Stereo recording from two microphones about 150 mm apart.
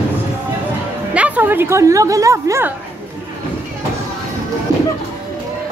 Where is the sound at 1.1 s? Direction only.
10° right (ahead or behind).